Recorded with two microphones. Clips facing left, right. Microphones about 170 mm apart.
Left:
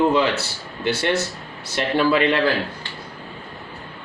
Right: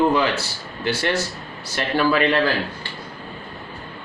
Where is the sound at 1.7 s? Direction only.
20° left (ahead or behind).